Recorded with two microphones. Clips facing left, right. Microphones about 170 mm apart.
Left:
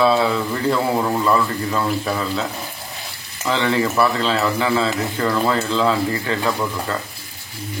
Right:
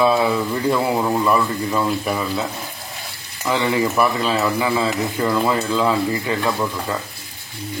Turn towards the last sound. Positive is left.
turn(degrees=-5)  # may be behind; listen again after turning